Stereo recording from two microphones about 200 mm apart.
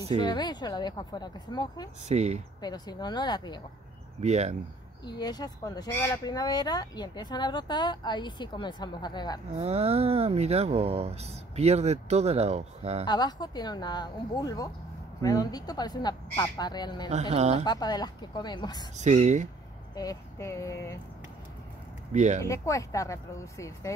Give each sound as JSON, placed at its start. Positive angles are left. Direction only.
{"t": 0.1, "sound": "speech", "side_deg": 20}
{"t": 2.0, "sound": "speech", "side_deg": -35}
{"t": 2.6, "sound": "speech", "side_deg": 20}
{"t": 4.2, "sound": "speech", "side_deg": -35}
{"t": 5.0, "sound": "speech", "side_deg": 20}
{"t": 9.6, "sound": "speech", "side_deg": -30}
{"t": 13.0, "sound": "speech", "side_deg": 20}
{"t": 17.3, "sound": "speech", "side_deg": -30}
{"t": 17.6, "sound": "speech", "side_deg": 20}
{"t": 18.9, "sound": "speech", "side_deg": -35}
{"t": 20.0, "sound": "speech", "side_deg": 15}
{"t": 22.1, "sound": "speech", "side_deg": -35}
{"t": 22.4, "sound": "speech", "side_deg": 15}